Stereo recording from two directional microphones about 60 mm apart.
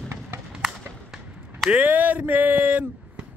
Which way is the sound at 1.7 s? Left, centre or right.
Right.